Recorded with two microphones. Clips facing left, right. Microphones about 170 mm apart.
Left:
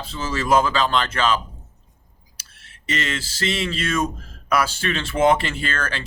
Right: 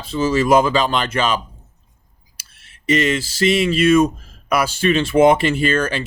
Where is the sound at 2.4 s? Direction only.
15° right (ahead or behind).